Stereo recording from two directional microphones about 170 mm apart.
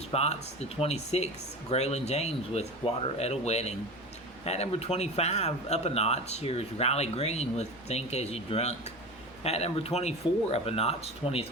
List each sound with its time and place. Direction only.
0.1 s speech: 40° left (ahead or behind)